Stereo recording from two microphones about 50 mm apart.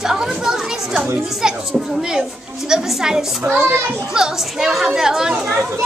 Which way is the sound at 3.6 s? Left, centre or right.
Right.